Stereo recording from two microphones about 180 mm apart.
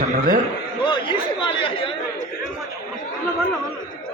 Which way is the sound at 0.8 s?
25° left (ahead or behind).